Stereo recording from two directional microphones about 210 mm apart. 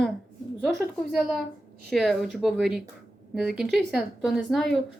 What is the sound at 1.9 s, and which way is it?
A woman's voice, centre (ahead or behind).